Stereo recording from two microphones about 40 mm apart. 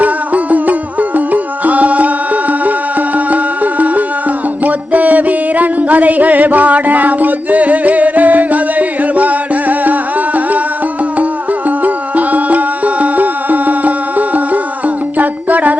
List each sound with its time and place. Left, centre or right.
0.0 s music: right
4.6 s a sound: right
11.8 s music: right